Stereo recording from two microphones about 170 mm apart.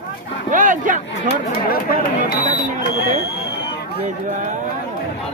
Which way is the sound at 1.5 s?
60° left (ahead or behind).